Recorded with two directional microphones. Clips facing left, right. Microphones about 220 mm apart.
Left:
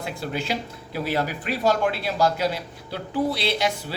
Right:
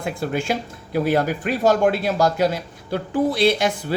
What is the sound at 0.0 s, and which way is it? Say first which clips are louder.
Speech: right 5 dB; 50° right (ahead or behind).